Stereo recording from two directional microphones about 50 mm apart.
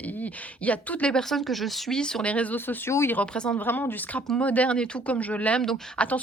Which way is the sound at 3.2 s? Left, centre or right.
Left.